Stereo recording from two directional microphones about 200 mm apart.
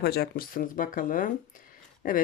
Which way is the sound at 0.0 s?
55° left (ahead or behind).